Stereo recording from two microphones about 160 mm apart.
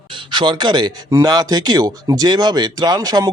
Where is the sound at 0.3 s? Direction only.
30° right (ahead or behind).